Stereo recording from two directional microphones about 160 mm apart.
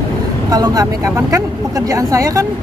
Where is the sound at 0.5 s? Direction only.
25° right (ahead or behind).